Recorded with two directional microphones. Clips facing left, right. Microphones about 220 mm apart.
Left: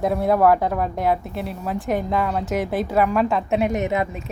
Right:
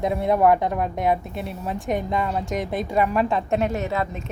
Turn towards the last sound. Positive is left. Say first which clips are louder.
# left 3 dB
turn(degrees=15)  # may be behind; listen again after turning